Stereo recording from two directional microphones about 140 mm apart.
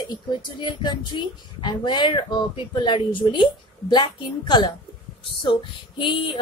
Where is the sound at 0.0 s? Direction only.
30° left (ahead or behind).